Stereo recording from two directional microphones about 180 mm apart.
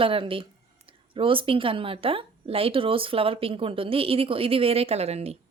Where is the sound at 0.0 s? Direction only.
30° right (ahead or behind).